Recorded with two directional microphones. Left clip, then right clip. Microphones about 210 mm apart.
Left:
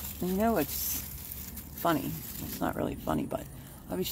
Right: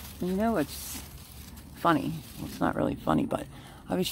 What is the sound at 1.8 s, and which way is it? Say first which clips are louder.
Speech: right 4 dB; 25° right (ahead or behind).